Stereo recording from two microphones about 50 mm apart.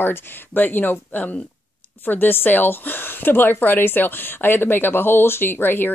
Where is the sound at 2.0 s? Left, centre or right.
Left.